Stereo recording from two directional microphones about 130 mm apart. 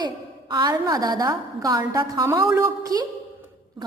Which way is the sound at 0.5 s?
30° right (ahead or behind).